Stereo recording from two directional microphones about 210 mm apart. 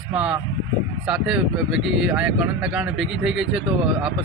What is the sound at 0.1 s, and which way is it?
Speech, 5° right (ahead or behind).